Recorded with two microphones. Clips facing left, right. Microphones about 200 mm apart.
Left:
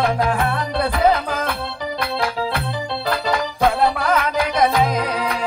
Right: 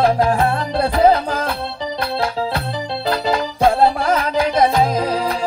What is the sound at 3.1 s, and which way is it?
Music, 30° right (ahead or behind).